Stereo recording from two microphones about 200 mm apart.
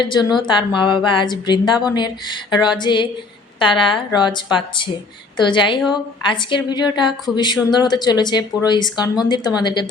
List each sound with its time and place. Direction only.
0.0 s a woman's voice: 20° left (ahead or behind)